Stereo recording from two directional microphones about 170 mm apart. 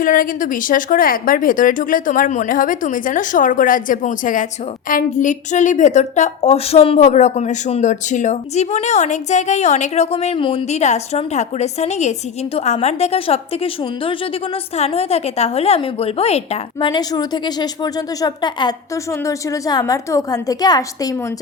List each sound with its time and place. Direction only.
0.0 s a woman's voice: 55° left (ahead or behind); by 21.2 s 20° left (ahead or behind)